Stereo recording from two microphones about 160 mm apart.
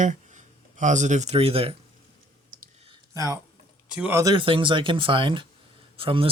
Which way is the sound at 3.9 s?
10° right (ahead or behind).